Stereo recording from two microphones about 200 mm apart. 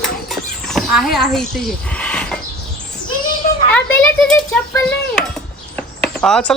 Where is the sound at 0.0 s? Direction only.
Centre (ahead or behind).